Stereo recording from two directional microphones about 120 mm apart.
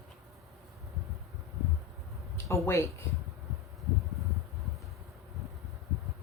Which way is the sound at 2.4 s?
25° left (ahead or behind).